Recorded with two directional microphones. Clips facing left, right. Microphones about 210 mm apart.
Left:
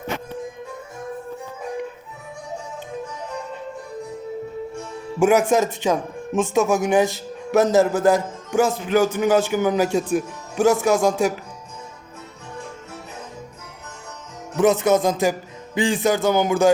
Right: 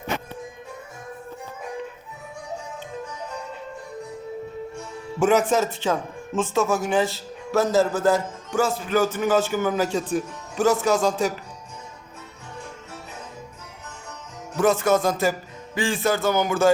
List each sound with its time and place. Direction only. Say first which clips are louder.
5.2 s speech: left 3 dB; 10° left (ahead or behind)
14.5 s speech: left 3 dB; 20° left (ahead or behind)